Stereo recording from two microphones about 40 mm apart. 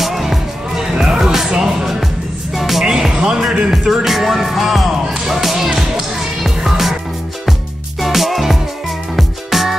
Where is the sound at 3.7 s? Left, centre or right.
Centre.